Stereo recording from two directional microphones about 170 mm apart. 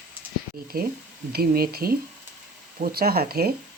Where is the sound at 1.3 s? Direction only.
60° right (ahead or behind).